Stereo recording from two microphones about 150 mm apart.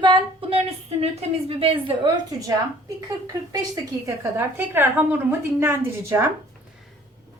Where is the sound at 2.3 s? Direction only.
25° right (ahead or behind).